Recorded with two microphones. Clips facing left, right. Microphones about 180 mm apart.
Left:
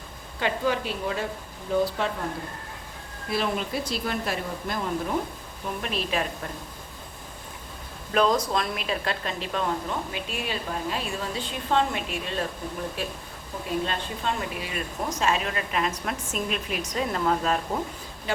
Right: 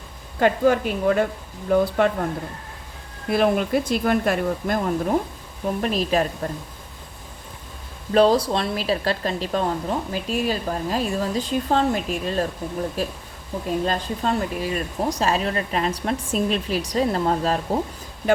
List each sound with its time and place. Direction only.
0.3 s speech: 50° right (ahead or behind)
3.2 s speech: 55° right (ahead or behind)
5.6 s speech: 40° right (ahead or behind)
8.1 s speech: 30° right (ahead or behind)